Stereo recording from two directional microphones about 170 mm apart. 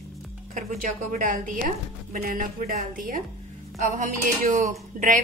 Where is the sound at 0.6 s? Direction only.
50° right (ahead or behind).